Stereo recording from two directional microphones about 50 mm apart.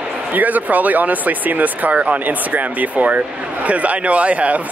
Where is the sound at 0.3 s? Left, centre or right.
Right.